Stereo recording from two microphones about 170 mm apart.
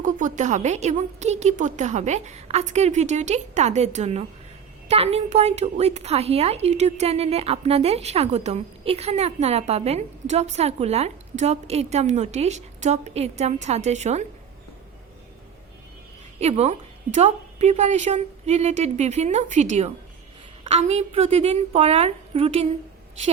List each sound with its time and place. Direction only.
0.0 s a woman's voice: 50° right (ahead or behind)
16.4 s a woman's voice: 40° right (ahead or behind)